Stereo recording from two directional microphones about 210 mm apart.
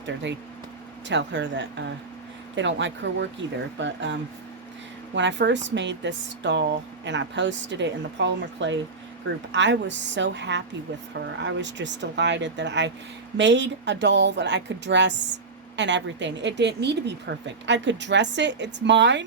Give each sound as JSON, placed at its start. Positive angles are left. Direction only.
{"t": 1.0, "sound": "a woman's voice", "side_deg": -60}